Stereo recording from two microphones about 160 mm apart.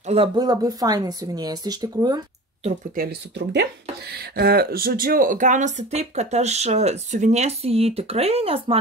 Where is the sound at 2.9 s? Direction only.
80° right.